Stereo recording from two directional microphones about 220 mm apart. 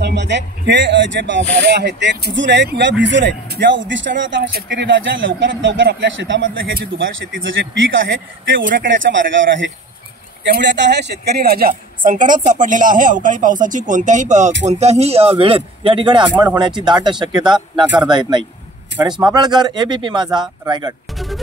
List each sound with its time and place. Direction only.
0.0 s a man's voice: 50° right (ahead or behind); by 20.9 s 20° right (ahead or behind)